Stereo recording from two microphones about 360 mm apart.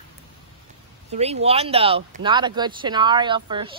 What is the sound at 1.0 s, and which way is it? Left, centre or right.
Speech, centre.